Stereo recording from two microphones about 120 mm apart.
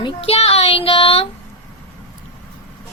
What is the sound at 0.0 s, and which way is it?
Child singing, 55° left (ahead or behind).